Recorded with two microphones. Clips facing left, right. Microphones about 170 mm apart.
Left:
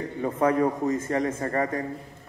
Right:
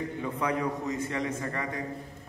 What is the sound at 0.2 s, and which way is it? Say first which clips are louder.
Speech: left 9 dB; 45° left (ahead or behind).